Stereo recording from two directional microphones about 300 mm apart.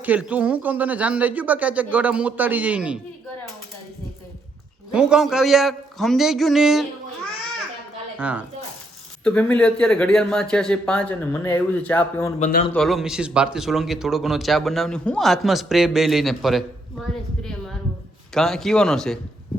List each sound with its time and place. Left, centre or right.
0.0 s a man's voice: centre
4.9 s a man's voice: centre
8.2 s a man's voice: centre
12.4 s a man's voice: left
12.7 s a man's voice: centre
18.3 s a man's voice: centre